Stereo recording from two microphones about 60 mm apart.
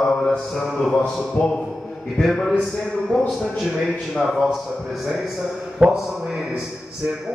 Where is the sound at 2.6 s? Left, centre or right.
Centre.